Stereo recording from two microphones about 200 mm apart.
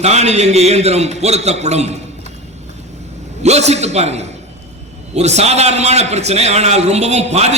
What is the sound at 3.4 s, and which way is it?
A man's voice, 35° right (ahead or behind).